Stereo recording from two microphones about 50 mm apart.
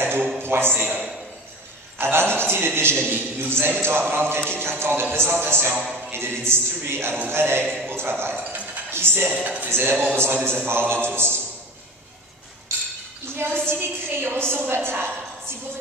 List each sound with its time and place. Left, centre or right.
0.0 s a sound: right
0.4 s a man's voice: right
2.0 s a man's voice: right
13.4 s a woman's voice: right